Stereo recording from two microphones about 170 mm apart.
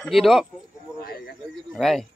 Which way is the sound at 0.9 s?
60° left (ahead or behind).